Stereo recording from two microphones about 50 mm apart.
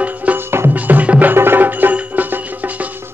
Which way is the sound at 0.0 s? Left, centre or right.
Right.